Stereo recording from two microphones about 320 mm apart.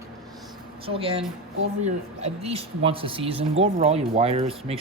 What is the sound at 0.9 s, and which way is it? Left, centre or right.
Speech, centre.